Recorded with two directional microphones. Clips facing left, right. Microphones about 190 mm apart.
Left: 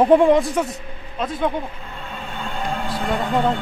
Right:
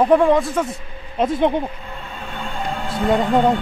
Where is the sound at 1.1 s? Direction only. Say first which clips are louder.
Right 5 dB; 25° right (ahead or behind).